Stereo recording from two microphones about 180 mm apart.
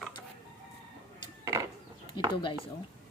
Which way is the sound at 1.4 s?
20° right (ahead or behind).